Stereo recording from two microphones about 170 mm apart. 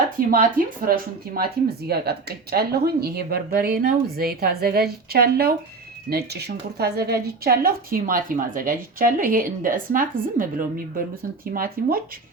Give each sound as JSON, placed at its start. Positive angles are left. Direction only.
{"t": 0.3, "sound": "speech", "side_deg": -60}
{"t": 11.5, "sound": "speech", "side_deg": -60}